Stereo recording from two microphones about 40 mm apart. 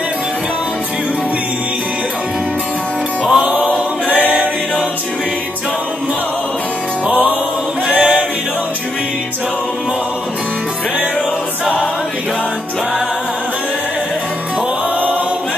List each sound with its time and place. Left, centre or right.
3.3 s music: right
4.3 s choir: right
7.1 s music: right
7.9 s choir: right